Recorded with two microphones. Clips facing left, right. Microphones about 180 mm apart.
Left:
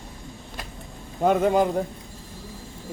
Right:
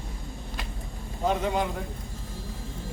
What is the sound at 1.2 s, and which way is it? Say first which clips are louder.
Speech: left 7 dB; 50° left (ahead or behind).